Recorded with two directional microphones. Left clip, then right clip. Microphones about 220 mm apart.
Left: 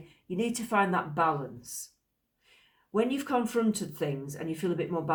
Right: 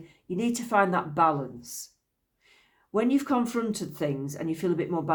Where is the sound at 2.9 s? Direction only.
40° right (ahead or behind).